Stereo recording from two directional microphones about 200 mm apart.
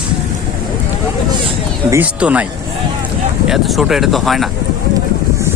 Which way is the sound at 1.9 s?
5° right (ahead or behind).